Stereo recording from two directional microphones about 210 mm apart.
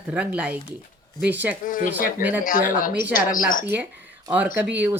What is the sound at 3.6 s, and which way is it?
Speech, 10° right (ahead or behind).